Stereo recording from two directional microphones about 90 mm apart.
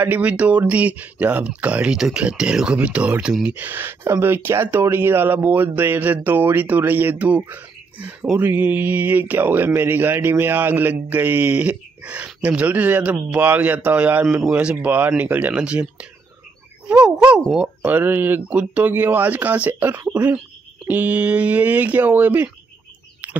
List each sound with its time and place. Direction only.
0.0 s speech: 20° right (ahead or behind)